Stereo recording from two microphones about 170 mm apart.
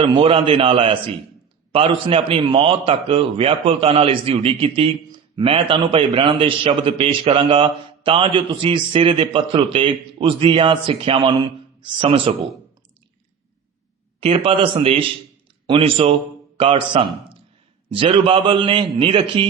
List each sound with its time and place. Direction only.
0.0 s a man's voice: 30° right (ahead or behind)
14.2 s a man's voice: 35° right (ahead or behind)